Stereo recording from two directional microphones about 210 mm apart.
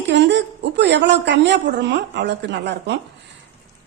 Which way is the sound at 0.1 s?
55° right (ahead or behind).